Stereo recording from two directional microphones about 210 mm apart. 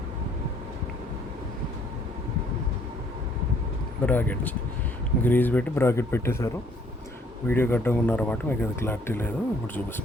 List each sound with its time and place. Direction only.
4.0 s speech: 10° left (ahead or behind)